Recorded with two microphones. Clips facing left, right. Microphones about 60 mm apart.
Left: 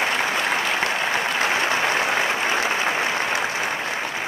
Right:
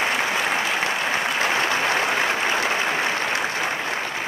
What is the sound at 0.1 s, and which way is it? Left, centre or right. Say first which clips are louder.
Applause: even; centre.